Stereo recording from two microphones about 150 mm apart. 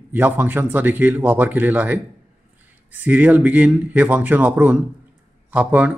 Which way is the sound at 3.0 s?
10° right (ahead or behind).